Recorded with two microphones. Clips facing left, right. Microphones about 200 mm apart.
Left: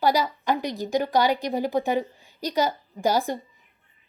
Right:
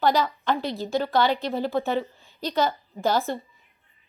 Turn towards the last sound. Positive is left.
turn(degrees=15)  # may be behind; listen again after turning